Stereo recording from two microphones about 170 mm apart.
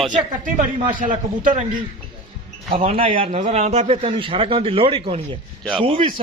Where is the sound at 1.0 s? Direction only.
50° right (ahead or behind).